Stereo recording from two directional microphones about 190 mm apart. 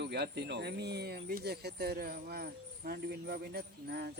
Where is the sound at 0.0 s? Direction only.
60° right (ahead or behind).